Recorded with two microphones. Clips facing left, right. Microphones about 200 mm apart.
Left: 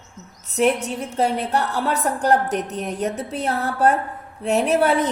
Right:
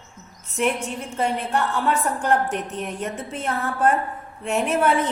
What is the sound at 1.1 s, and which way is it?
A woman's voice, 40° left (ahead or behind).